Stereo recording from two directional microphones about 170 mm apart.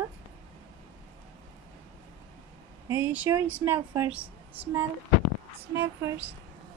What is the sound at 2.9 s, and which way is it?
A woman's voice, 10° right (ahead or behind).